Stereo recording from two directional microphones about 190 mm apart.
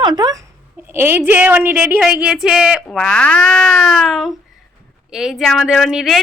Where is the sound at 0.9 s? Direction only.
10° right (ahead or behind).